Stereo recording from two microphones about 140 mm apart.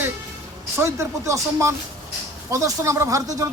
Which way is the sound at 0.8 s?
20° right (ahead or behind).